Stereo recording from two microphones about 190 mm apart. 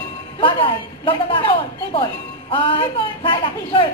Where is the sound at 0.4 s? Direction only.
25° left (ahead or behind).